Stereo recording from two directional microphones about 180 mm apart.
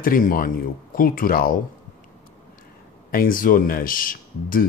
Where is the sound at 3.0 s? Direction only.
50° left (ahead or behind).